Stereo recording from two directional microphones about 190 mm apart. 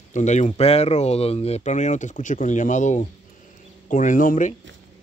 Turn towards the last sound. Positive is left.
turn(degrees=45)  # may be behind; listen again after turning